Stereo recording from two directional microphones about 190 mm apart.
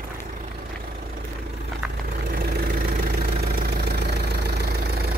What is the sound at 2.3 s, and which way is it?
Engine, 50° right (ahead or behind).